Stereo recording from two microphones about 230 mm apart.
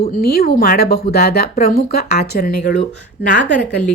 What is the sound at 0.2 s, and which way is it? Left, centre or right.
Speech, left.